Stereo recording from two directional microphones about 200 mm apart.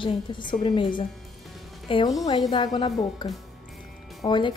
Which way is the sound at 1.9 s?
25° left (ahead or behind).